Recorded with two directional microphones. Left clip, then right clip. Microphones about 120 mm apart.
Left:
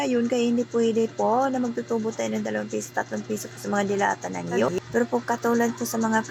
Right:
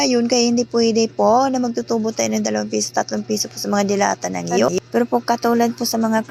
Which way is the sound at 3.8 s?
50° right (ahead or behind).